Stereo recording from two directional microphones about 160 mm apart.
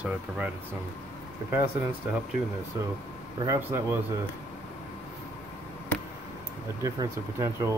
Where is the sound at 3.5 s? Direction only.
15° right (ahead or behind).